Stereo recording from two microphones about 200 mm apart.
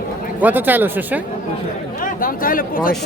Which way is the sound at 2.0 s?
45° left (ahead or behind).